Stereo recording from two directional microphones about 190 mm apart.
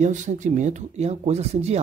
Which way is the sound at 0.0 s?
40° right (ahead or behind).